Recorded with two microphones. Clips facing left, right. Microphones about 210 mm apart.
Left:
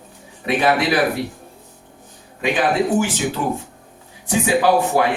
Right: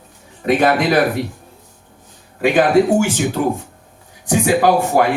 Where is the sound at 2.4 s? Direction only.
50° right (ahead or behind).